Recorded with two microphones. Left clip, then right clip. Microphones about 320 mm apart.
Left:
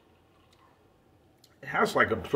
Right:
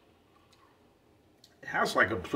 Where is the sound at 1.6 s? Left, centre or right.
Centre.